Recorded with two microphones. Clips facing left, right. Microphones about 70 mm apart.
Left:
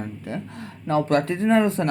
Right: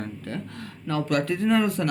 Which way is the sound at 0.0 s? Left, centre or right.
Centre.